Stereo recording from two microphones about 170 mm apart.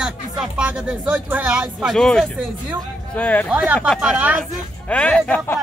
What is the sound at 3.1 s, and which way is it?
Speech, 10° left (ahead or behind).